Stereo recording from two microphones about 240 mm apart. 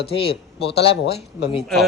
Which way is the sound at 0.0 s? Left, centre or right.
Left.